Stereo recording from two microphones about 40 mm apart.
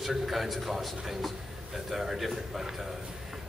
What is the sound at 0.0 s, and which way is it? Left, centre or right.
A man's voice, centre.